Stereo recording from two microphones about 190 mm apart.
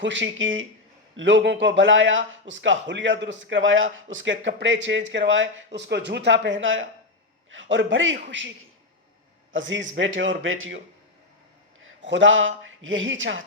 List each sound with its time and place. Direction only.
0.0 s a man's voice: 75° right (ahead or behind)
1.1 s speech: 75° right (ahead or behind)
7.5 s a man's voice: 75° right (ahead or behind)
11.8 s a man's voice: 80° right